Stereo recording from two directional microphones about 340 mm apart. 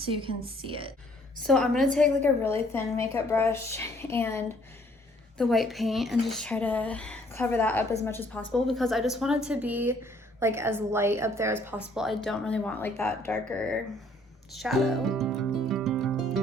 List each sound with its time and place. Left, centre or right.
0.0 s a woman's voice: centre
1.5 s a woman's voice: centre
14.5 s music: centre